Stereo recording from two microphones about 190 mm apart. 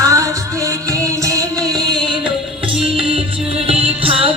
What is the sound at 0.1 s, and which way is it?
Music, 15° right (ahead or behind).